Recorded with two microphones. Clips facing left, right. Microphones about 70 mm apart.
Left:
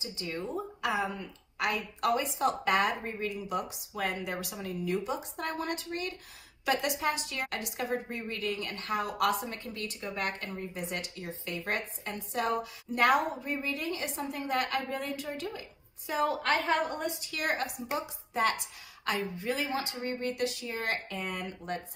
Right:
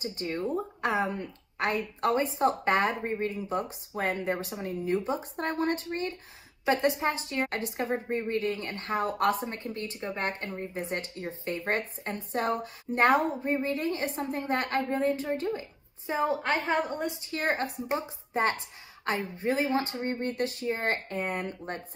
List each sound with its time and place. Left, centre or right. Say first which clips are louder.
0.0 s a woman's voice: right 5 dB; right